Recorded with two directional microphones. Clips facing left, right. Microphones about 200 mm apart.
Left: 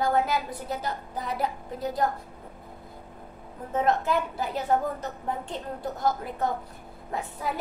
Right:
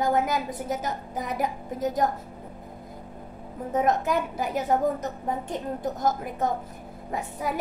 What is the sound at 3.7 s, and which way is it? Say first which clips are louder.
A woman's voice: right 1 dB; 15° right (ahead or behind).